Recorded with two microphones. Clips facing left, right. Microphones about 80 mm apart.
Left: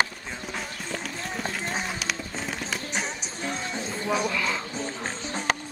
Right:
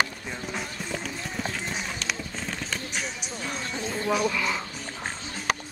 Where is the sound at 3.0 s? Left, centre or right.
Left.